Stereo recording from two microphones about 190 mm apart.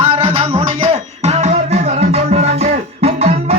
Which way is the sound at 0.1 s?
30° right (ahead or behind).